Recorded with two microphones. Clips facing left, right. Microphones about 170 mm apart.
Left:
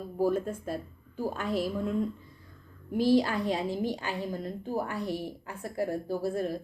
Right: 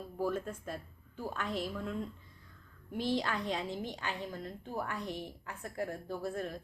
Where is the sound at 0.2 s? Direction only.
35° left (ahead or behind).